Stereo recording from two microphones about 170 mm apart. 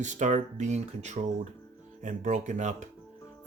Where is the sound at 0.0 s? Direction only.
45° right (ahead or behind).